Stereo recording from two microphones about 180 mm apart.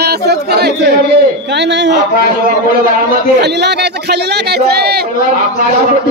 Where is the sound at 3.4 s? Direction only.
70° right (ahead or behind).